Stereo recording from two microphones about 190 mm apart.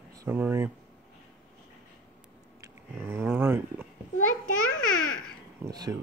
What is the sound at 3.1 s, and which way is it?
Speech, 10° right (ahead or behind).